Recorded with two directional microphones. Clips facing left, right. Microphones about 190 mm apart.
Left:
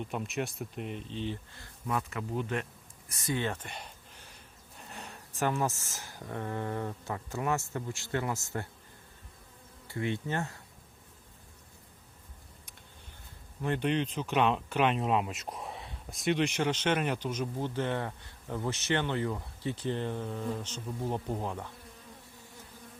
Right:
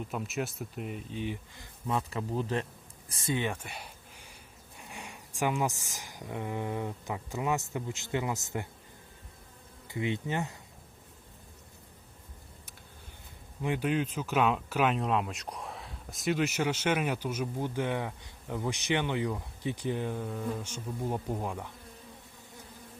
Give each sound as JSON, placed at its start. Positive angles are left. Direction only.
{"t": 0.0, "sound": "speech", "side_deg": 0}
{"t": 3.4, "sound": "a sound", "side_deg": -10}
{"t": 4.8, "sound": "speech", "side_deg": -10}
{"t": 9.8, "sound": "speech", "side_deg": -15}
{"t": 13.6, "sound": "speech", "side_deg": -10}